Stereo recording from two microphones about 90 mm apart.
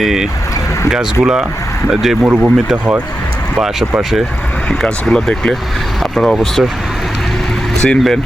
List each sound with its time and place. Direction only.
0.0 s speech: 5° right (ahead or behind)
2.2 s speech: 15° right (ahead or behind)
4.7 s speech: 5° left (ahead or behind)
7.8 s speech: 5° left (ahead or behind)